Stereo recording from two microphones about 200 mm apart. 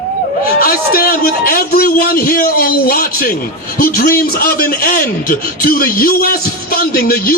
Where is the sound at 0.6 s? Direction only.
45° left (ahead or behind).